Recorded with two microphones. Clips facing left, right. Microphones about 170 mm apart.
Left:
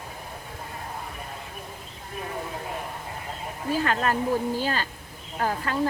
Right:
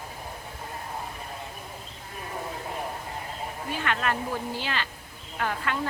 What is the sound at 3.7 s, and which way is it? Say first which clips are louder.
Speech: left 5 dB; 35° left (ahead or behind).